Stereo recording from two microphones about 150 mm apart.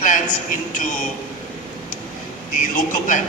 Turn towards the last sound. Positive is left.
turn(degrees=60)  # may be behind; listen again after turning